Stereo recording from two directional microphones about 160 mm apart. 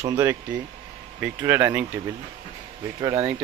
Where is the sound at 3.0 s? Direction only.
25° right (ahead or behind).